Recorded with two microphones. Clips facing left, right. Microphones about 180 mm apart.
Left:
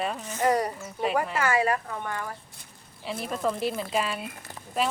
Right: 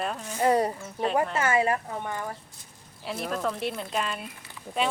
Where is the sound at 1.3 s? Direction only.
25° right (ahead or behind).